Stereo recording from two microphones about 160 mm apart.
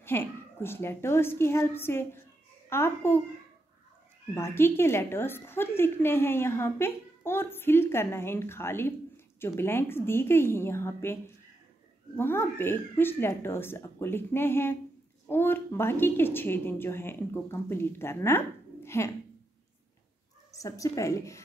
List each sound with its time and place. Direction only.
0.0 s a woman's voice: 15° left (ahead or behind)
4.3 s a woman's voice: 15° left (ahead or behind)
20.5 s speech: 20° left (ahead or behind)